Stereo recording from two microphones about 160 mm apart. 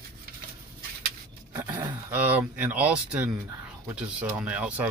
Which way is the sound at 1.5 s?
25° right (ahead or behind).